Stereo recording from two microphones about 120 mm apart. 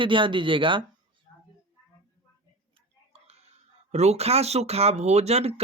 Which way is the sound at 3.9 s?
65° right (ahead or behind).